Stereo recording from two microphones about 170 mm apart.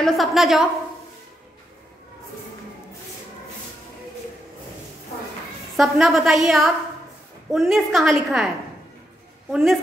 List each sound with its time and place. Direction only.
0.0 s a woman's voice: centre (ahead or behind)
5.8 s a woman's voice: centre (ahead or behind)
9.5 s a woman's voice: centre (ahead or behind)